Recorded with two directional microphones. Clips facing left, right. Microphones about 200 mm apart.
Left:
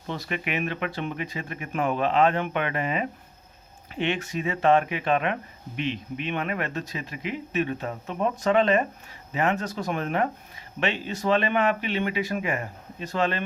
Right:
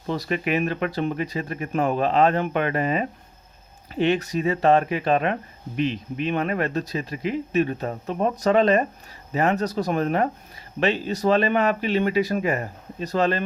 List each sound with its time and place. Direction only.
0.1 s speech: 40° right (ahead or behind)